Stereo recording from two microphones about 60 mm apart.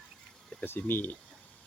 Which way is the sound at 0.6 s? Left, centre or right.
Left.